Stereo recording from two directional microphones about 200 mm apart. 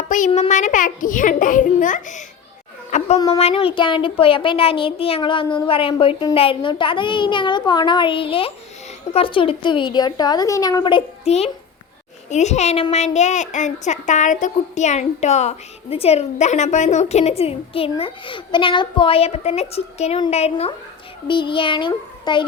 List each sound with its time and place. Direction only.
0.3 s a woman's voice: 35° left (ahead or behind)